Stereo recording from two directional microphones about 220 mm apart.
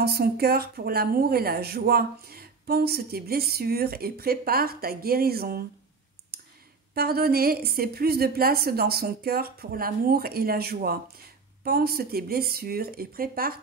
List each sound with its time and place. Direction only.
0.0 s speech: 45° right (ahead or behind)
6.3 s clicking: 45° right (ahead or behind)
6.9 s speech: 45° right (ahead or behind)